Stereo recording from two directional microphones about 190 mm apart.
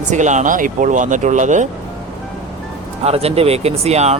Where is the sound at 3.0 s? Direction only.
30° right (ahead or behind).